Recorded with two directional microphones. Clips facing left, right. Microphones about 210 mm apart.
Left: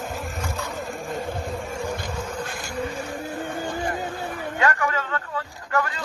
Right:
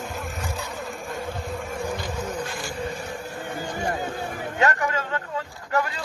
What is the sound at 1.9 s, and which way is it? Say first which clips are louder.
Insect: right 1 dB; 50° left (ahead or behind).